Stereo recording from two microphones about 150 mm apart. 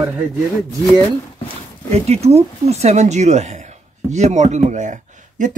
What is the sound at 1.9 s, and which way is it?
Speech, 45° right (ahead or behind).